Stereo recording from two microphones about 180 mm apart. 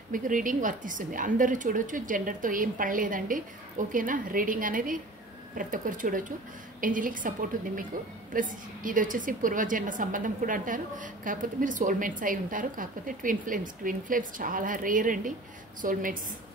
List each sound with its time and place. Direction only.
0.1 s a woman's voice: 50° right (ahead or behind)